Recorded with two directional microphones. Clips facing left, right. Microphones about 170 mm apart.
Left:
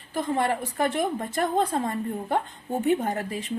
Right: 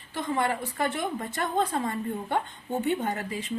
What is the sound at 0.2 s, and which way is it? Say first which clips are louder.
Speech: left 3 dB; 40° left (ahead or behind).